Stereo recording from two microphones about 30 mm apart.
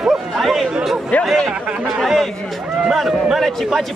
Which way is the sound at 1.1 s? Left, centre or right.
Left.